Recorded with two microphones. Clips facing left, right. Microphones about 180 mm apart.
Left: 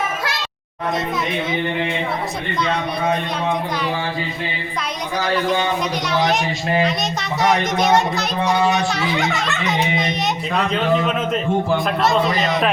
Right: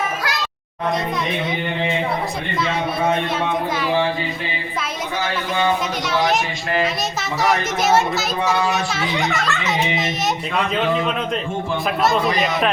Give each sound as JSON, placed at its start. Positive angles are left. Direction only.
{"t": 6.1, "sound": "a child's voice", "side_deg": 0}